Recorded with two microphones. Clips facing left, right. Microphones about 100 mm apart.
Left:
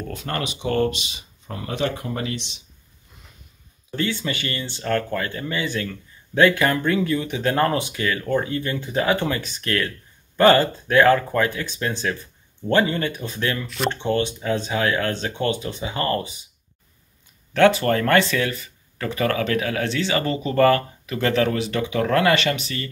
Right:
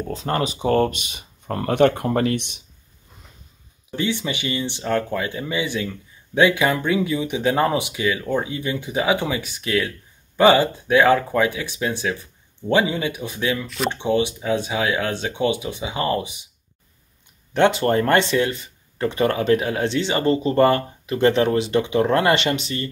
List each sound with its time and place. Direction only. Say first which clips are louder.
0.1 s speech: right 6 dB; 30° right (ahead or behind)
1.0 s speech: right 6 dB; 50° right (ahead or behind)
3.9 s speech: right 1 dB; 15° right (ahead or behind)
17.6 s speech: even; 25° right (ahead or behind)